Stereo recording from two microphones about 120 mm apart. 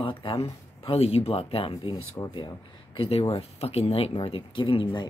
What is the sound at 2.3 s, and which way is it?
Speech, 45° left (ahead or behind).